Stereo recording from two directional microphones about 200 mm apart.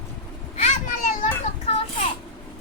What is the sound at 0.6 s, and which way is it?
Children playing, 40° left (ahead or behind).